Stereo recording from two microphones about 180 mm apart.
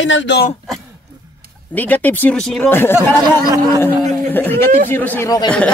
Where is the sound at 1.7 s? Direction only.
10° left (ahead or behind).